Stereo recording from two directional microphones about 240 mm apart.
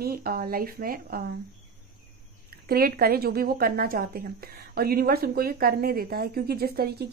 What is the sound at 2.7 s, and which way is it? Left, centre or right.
A woman's voice, right.